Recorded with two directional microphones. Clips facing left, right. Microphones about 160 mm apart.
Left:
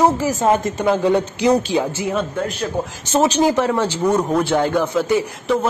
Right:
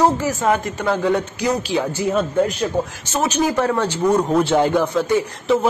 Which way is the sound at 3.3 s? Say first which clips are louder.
Left 3 dB; 30° left (ahead or behind).